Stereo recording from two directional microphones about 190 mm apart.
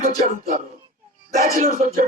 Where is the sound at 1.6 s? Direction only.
45° right (ahead or behind).